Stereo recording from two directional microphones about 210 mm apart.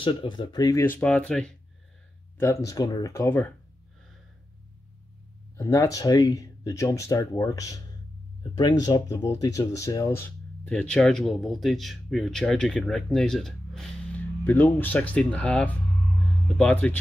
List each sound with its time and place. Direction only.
0.0 s speech: 25° left (ahead or behind)
5.6 s speech: 15° left (ahead or behind)
8.8 s speech: 20° left (ahead or behind)